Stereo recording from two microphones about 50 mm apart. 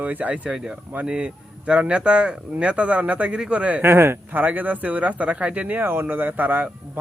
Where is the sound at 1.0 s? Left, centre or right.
Centre.